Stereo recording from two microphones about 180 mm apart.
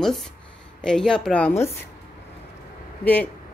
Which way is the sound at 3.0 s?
10° left (ahead or behind).